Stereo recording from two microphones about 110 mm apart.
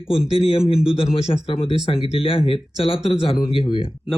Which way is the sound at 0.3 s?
60° left (ahead or behind).